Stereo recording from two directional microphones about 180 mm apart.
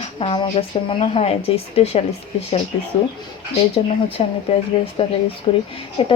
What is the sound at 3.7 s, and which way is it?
Speech, 30° left (ahead or behind).